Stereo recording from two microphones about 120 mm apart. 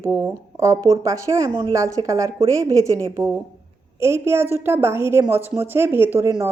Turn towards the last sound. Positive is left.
turn(degrees=-20)  # may be behind; listen again after turning